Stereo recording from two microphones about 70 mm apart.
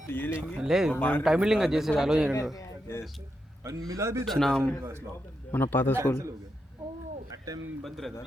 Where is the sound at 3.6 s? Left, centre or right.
Right.